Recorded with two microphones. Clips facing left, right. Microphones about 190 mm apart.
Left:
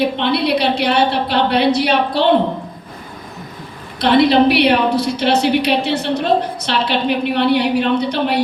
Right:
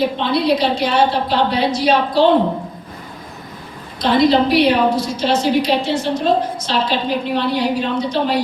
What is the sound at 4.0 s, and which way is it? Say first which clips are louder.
A woman's voice: left 2 dB; 65° left (ahead or behind).